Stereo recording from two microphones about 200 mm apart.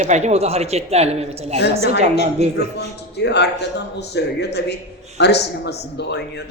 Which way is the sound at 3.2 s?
60° left (ahead or behind).